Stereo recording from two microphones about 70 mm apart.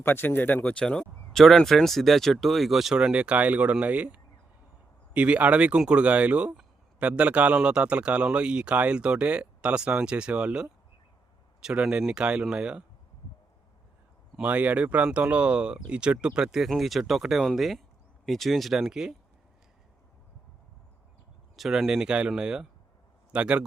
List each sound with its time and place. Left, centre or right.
0.0 s speech: left; by 12.8 s centre
14.4 s speech: right; by 19.1 s centre
21.5 s speech: centre